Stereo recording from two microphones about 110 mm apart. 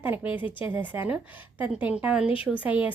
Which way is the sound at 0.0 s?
20° right (ahead or behind).